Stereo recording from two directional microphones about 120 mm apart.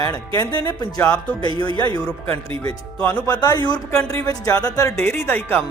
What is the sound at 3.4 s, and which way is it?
Speech, 35° left (ahead or behind).